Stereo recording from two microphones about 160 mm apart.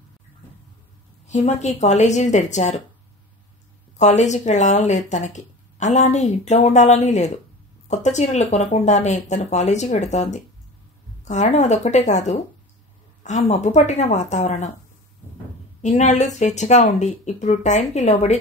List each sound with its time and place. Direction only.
1.2 s speech: 45° left (ahead or behind)
4.0 s speech: 45° left (ahead or behind)
13.5 s speech: 45° left (ahead or behind)
15.8 s speech: 50° left (ahead or behind)